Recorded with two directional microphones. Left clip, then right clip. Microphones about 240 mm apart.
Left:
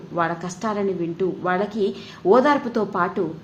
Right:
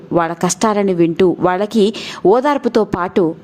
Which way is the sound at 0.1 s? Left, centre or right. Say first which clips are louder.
Right 8 dB; right.